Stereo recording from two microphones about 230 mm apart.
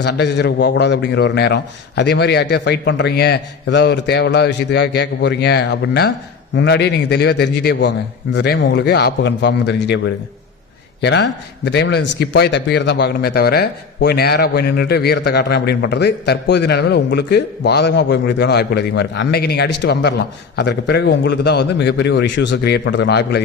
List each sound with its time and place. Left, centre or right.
0.0 s a man's voice: left